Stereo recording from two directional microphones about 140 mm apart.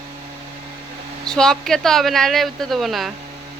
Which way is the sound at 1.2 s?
5° left (ahead or behind).